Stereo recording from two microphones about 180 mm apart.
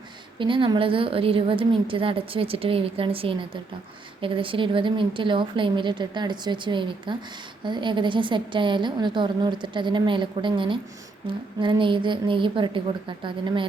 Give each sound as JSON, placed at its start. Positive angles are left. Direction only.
{"t": 0.3, "sound": "a woman's voice", "side_deg": -30}